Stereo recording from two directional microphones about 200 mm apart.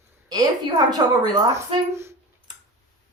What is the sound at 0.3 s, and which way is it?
A woman's voice, 20° right (ahead or behind).